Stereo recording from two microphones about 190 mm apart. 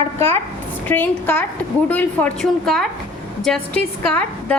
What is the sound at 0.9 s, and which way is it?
A woman's voice, 10° left (ahead or behind).